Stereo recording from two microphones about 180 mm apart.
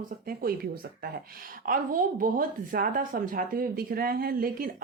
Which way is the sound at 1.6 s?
50° right (ahead or behind).